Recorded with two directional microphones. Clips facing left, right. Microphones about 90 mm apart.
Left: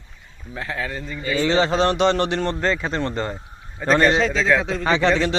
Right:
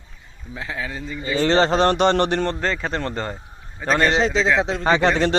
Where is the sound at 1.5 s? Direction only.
55° right (ahead or behind).